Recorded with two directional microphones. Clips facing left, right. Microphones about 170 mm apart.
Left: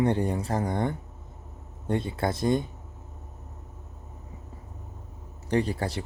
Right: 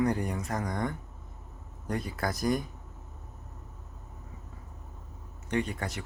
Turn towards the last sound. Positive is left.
turn(degrees=30)  # may be behind; listen again after turning